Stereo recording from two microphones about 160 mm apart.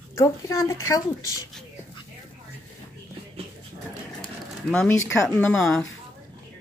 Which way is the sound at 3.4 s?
40° right (ahead or behind).